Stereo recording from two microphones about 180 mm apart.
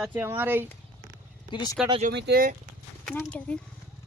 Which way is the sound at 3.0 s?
5° left (ahead or behind).